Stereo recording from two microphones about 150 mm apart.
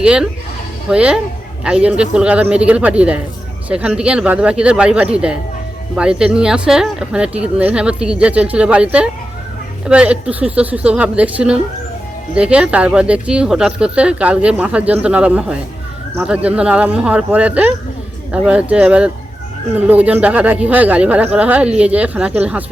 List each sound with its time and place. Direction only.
0.0 s speech: 5° right (ahead or behind)